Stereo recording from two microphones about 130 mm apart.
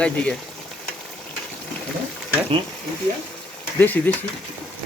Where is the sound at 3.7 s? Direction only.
15° left (ahead or behind).